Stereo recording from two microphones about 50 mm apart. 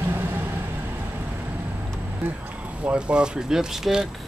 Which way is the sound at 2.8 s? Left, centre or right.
Right.